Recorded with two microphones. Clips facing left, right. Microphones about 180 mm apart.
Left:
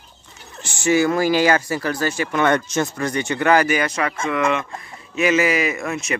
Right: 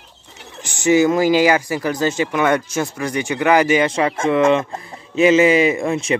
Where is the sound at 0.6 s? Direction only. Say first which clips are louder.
Right 3 dB; 20° right (ahead or behind).